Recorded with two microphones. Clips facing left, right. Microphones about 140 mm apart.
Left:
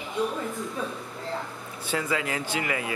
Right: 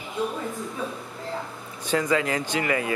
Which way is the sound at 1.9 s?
40° right (ahead or behind).